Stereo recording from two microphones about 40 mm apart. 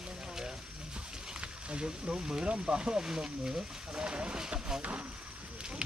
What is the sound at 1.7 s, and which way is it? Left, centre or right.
Speech, right.